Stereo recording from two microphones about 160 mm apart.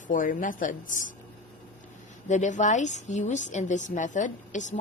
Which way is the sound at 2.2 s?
50° left (ahead or behind).